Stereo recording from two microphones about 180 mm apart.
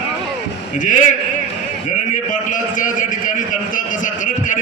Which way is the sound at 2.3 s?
45° left (ahead or behind).